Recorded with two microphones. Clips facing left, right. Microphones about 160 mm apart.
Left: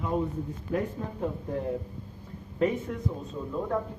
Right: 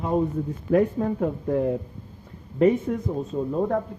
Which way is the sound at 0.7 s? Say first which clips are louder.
Right 11 dB; 70° right (ahead or behind).